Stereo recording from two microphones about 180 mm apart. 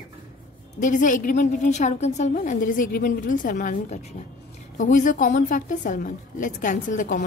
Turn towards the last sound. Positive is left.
turn(degrees=45)  # may be behind; listen again after turning